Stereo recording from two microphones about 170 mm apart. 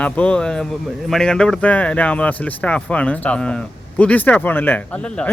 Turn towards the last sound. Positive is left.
turn(degrees=5)  # may be behind; listen again after turning